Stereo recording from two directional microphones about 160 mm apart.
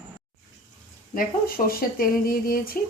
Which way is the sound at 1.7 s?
65° left (ahead or behind).